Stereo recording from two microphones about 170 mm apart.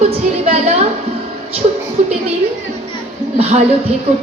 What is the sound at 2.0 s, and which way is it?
Speech, 40° right (ahead or behind).